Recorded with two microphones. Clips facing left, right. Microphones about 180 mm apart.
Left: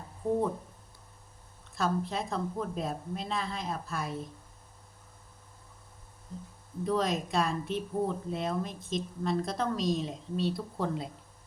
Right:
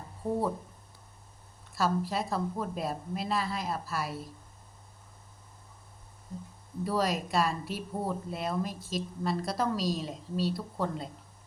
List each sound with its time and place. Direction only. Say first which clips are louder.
1.7 s speech: right 1 dB; 5° right (ahead or behind)
6.8 s speech: even; 5° right (ahead or behind)